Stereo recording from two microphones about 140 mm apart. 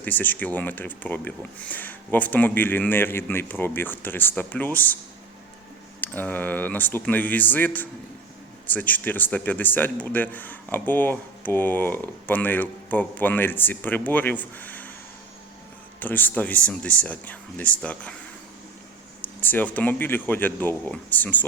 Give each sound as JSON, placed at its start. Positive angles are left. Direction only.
{"t": 0.0, "sound": "speech", "side_deg": 10}
{"t": 6.0, "sound": "speech", "side_deg": 15}
{"t": 16.0, "sound": "speech", "side_deg": 10}
{"t": 19.2, "sound": "speech", "side_deg": 15}